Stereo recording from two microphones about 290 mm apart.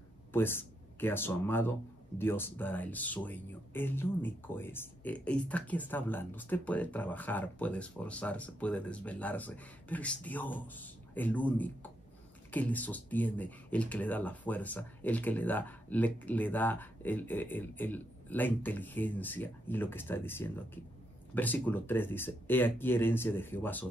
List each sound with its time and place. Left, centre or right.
0.3 s speech: centre